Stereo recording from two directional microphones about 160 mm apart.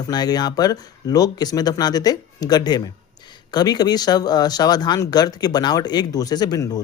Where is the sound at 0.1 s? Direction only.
25° left (ahead or behind).